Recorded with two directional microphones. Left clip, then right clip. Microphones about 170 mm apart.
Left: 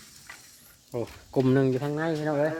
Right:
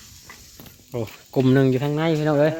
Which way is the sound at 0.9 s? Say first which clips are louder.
Right 4 dB; 5° left (ahead or behind).